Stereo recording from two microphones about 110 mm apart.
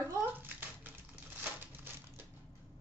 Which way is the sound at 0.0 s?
20° right (ahead or behind).